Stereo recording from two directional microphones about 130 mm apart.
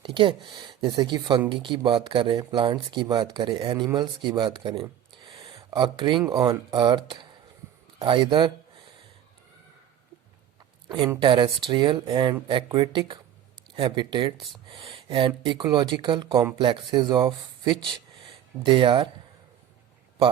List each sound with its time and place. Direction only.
0.0 s speech: 40° right (ahead or behind)
10.8 s speech: 35° right (ahead or behind)
14.7 s a sound: 45° right (ahead or behind)
15.4 s speech: 35° right (ahead or behind)